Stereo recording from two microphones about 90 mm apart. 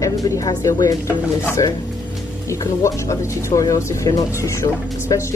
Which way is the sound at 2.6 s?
35° left (ahead or behind).